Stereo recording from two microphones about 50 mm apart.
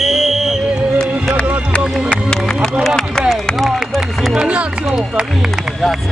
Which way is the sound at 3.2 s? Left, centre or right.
Centre.